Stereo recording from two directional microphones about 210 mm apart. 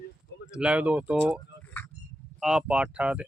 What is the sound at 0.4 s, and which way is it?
Speech, 5° right (ahead or behind).